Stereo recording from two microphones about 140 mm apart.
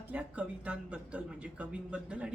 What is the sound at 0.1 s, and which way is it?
A woman's voice, 10° right (ahead or behind).